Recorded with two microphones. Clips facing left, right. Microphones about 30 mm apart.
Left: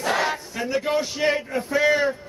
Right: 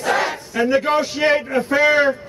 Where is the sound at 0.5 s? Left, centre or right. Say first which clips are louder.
Right 9 dB; right.